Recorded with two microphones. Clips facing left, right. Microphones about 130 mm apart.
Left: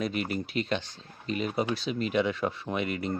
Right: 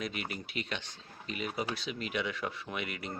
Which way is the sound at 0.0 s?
35° left (ahead or behind).